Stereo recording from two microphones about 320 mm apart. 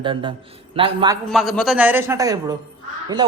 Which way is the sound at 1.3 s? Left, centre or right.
Centre.